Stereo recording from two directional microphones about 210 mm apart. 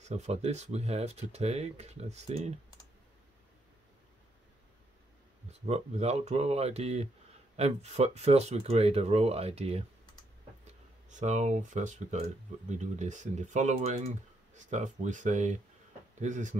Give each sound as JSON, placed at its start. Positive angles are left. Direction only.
{"t": 0.0, "sound": "speech", "side_deg": -30}
{"t": 5.7, "sound": "speech", "side_deg": -30}
{"t": 11.1, "sound": "speech", "side_deg": -35}